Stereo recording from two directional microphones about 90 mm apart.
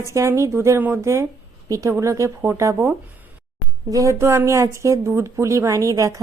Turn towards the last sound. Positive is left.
turn(degrees=-40)  # may be behind; listen again after turning